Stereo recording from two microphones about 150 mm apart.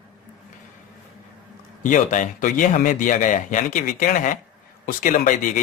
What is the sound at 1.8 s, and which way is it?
A man's voice, 60° left (ahead or behind).